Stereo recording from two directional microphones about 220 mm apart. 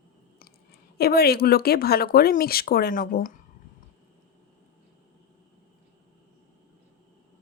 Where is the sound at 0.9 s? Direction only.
45° left (ahead or behind).